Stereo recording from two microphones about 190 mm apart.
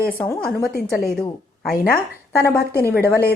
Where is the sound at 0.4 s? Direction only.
55° left (ahead or behind).